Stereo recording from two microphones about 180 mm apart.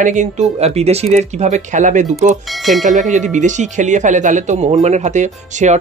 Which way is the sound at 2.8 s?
45° right (ahead or behind).